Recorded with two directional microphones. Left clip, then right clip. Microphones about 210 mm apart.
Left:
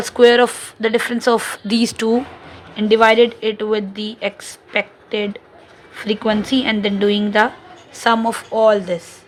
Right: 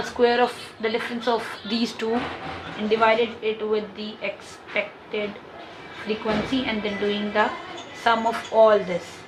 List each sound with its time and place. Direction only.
0.0 s speech: 55° left (ahead or behind)